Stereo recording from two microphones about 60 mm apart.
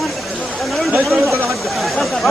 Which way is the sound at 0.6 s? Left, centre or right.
Centre.